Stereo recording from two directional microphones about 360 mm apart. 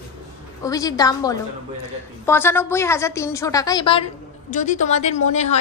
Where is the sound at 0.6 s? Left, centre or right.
Centre.